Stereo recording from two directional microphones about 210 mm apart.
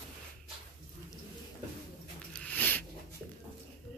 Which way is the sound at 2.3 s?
5° left (ahead or behind).